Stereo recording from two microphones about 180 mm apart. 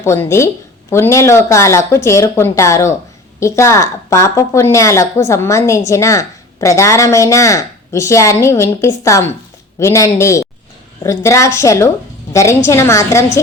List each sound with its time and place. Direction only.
0.0 s a woman's voice: 15° left (ahead or behind)